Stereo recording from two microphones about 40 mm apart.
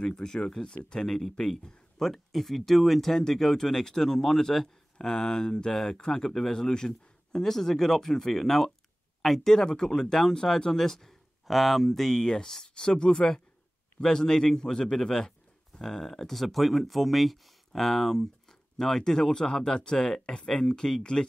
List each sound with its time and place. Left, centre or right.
0.0 s speech: centre